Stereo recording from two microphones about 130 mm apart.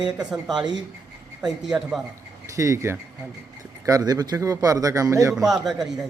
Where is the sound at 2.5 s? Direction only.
25° right (ahead or behind).